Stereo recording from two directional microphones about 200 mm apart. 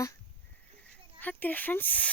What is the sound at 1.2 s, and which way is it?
Speech, 10° left (ahead or behind).